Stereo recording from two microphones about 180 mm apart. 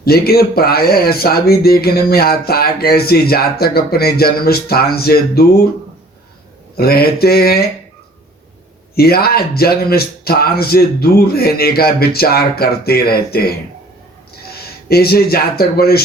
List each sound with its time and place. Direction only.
0.0 s speech: 60° left (ahead or behind)
6.7 s speech: 60° left (ahead or behind)
9.0 s speech: 60° left (ahead or behind)
14.5 s a man's voice: 60° left (ahead or behind)